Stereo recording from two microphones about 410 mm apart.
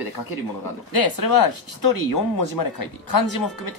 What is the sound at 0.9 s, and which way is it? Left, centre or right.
Speech, left.